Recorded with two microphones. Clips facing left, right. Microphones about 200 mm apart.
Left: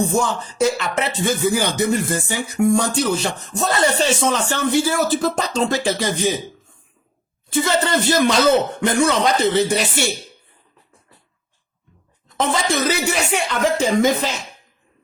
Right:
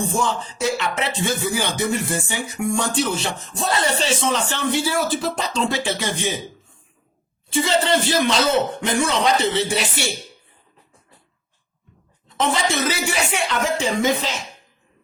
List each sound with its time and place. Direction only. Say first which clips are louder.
0.0 s music: left 3 dB; 40° left (ahead or behind)
3.2 s speech: left 2 dB; 45° left (ahead or behind)
7.5 s speech: even; 50° left (ahead or behind)
12.4 s music: left 1 dB; 40° left (ahead or behind)